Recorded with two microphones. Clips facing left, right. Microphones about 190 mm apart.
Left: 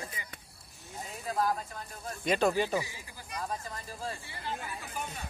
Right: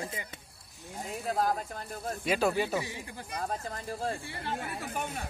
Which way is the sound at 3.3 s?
45° right (ahead or behind).